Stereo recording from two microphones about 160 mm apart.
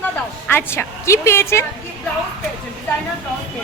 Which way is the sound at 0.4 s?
15° left (ahead or behind).